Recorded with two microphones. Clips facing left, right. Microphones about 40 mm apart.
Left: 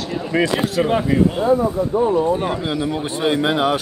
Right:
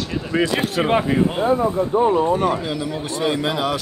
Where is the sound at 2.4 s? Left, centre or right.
Left.